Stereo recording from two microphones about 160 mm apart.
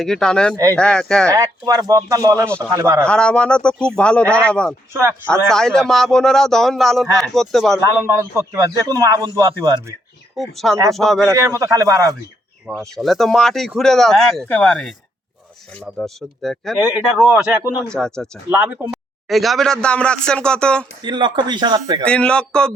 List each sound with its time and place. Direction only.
0.0 s speech: 5° left (ahead or behind)
1.3 s a man's voice: 25° right (ahead or behind)
3.0 s speech: 5° left (ahead or behind)
4.9 s speech: 15° right (ahead or behind)
5.3 s speech: 5° left (ahead or behind)
8.0 s a man's voice: 20° right (ahead or behind)
10.3 s speech: centre (ahead or behind)
11.3 s a man's voice: 20° right (ahead or behind)
12.7 s speech: 5° left (ahead or behind)
16.0 s speech: centre (ahead or behind)
18.5 s speech: 10° right (ahead or behind)
19.3 s speech: centre (ahead or behind)
21.0 s a man's voice: 30° right (ahead or behind)
22.0 s speech: 5° left (ahead or behind)